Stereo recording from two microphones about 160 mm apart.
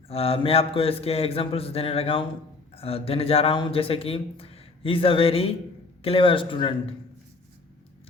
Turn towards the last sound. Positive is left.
turn(degrees=30)  # may be behind; listen again after turning